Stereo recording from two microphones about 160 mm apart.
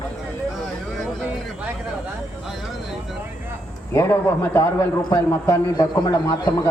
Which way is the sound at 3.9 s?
15° left (ahead or behind).